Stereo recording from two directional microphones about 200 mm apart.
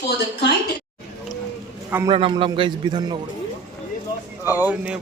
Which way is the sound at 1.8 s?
10° right (ahead or behind).